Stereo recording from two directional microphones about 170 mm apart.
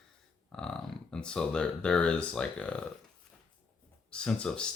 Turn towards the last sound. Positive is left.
turn(degrees=5)  # may be behind; listen again after turning